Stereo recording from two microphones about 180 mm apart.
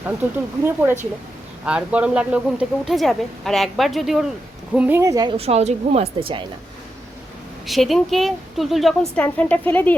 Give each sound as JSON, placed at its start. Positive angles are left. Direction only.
{"t": 0.2, "sound": "speech", "side_deg": -10}
{"t": 5.4, "sound": "a woman's voice", "side_deg": -35}
{"t": 7.7, "sound": "speech", "side_deg": 0}